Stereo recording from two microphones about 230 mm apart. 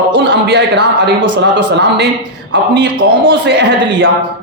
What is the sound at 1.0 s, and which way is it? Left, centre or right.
Speech, right.